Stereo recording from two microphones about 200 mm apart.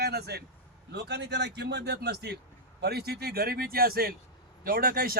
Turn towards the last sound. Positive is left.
turn(degrees=-50)  # may be behind; listen again after turning